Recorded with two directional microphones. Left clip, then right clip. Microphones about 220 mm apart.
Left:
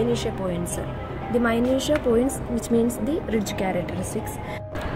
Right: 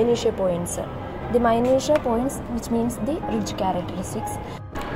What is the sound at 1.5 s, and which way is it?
Speech, 5° right (ahead or behind).